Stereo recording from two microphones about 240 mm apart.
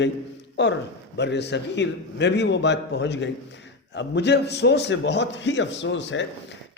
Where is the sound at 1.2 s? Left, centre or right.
Left.